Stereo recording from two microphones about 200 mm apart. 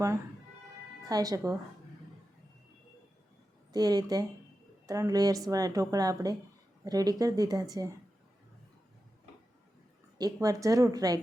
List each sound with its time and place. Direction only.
1.0 s speech: 20° right (ahead or behind)
3.7 s speech: 20° right (ahead or behind)
10.2 s speech: 20° right (ahead or behind)